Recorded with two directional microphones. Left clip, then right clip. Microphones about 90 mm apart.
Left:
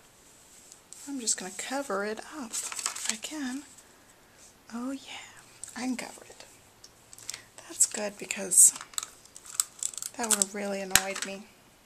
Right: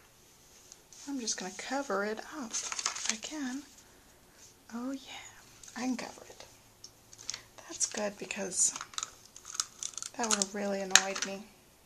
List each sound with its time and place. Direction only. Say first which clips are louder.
1.1 s speech: left 3 dB; 20° left (ahead or behind)
2.5 s speech: right 1 dB; centre (ahead or behind)
3.3 s speech: left 3 dB; 20° left (ahead or behind)
4.6 s speech: left 3 dB; 20° left (ahead or behind)
7.2 s a sound: even; 20° left (ahead or behind)
8.0 s speech: left 2 dB; 20° left (ahead or behind)
8.7 s computer keyboard: left 1 dB; 5° left (ahead or behind)
10.5 s speech: even; 20° left (ahead or behind)